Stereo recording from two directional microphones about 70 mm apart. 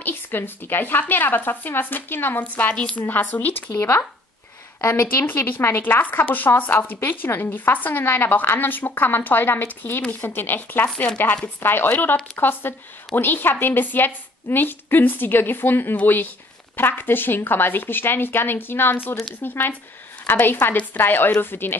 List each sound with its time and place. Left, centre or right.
0.0 s a woman's voice: left
3.7 s a woman's voice: left
5.2 s a woman's voice: left